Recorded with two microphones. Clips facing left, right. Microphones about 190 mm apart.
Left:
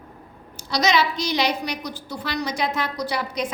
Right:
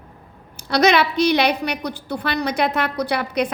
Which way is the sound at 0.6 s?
60° right (ahead or behind).